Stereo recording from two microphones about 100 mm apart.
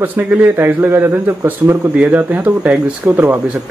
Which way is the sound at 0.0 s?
15° right (ahead or behind).